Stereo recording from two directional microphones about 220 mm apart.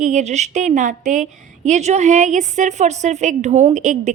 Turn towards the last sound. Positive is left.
turn(degrees=-35)  # may be behind; listen again after turning